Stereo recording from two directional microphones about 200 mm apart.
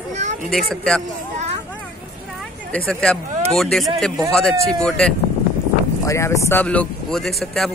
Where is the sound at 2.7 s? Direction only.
5° left (ahead or behind).